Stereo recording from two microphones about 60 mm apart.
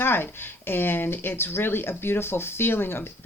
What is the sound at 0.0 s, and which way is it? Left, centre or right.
Speech, left.